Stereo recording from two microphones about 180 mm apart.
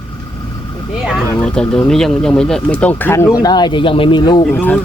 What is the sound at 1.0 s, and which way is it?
Speech, centre (ahead or behind).